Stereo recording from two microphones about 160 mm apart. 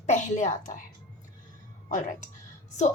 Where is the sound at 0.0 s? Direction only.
50° left (ahead or behind).